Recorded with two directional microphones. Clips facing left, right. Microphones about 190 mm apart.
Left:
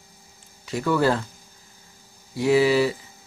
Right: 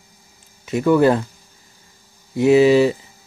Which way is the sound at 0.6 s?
20° right (ahead or behind).